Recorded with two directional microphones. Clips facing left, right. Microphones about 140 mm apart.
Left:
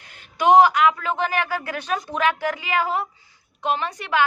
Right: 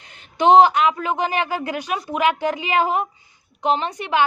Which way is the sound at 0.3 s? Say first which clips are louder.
Right 2 dB; 25° right (ahead or behind).